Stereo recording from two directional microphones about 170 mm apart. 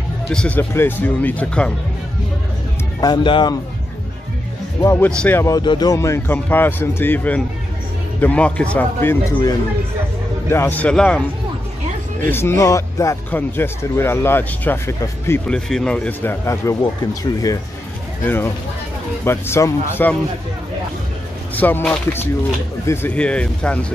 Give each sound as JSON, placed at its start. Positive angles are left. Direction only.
{"t": 0.3, "sound": "speech", "side_deg": 5}
{"t": 3.0, "sound": "speech", "side_deg": 25}
{"t": 4.8, "sound": "speech", "side_deg": 10}
{"t": 5.4, "sound": "speech", "side_deg": 20}
{"t": 12.3, "sound": "speech", "side_deg": 15}
{"t": 21.5, "sound": "speech", "side_deg": 10}